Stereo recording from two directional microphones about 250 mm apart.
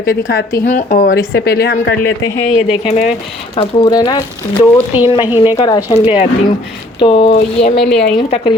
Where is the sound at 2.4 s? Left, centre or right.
Left.